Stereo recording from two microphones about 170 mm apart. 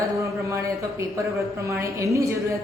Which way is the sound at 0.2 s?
15° right (ahead or behind).